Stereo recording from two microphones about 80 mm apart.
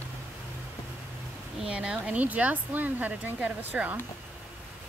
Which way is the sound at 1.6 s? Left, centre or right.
Centre.